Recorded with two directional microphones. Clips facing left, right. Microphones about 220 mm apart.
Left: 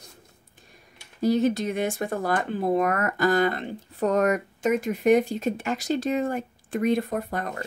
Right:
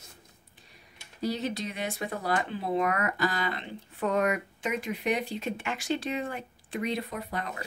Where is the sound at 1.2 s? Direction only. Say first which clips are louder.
Left 9 dB; 50° left (ahead or behind).